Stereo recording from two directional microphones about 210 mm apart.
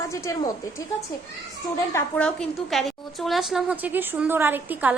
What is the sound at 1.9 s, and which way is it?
A woman's voice, 5° left (ahead or behind).